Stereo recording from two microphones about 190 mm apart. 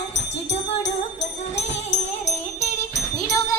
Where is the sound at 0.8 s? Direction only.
35° left (ahead or behind).